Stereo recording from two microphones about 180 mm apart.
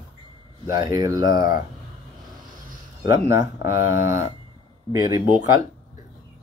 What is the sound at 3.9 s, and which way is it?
Speech, 15° right (ahead or behind).